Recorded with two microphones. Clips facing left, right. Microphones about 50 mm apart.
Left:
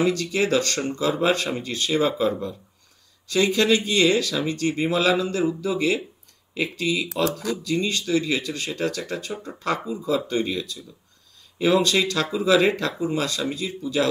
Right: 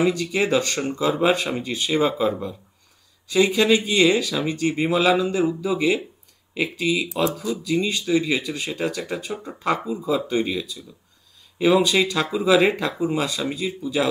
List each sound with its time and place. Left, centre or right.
0.0 s speech: centre